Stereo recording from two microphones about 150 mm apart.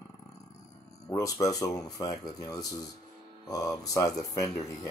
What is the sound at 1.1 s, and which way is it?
Speech, 20° left (ahead or behind).